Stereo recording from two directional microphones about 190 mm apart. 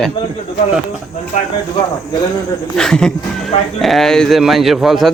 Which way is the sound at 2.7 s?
5° left (ahead or behind).